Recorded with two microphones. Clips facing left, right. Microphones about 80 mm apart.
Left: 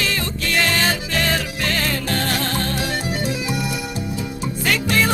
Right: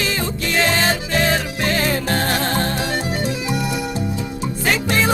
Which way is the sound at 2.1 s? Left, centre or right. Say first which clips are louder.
Right 3 dB; right.